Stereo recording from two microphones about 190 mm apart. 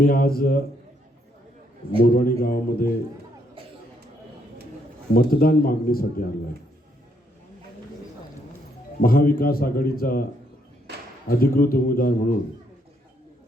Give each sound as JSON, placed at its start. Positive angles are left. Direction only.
{"t": 0.0, "sound": "a man's voice", "side_deg": 50}
{"t": 2.1, "sound": "a man's voice", "side_deg": 50}
{"t": 5.1, "sound": "a man's voice", "side_deg": 50}
{"t": 9.0, "sound": "a man's voice", "side_deg": 50}
{"t": 11.3, "sound": "a man's voice", "side_deg": 50}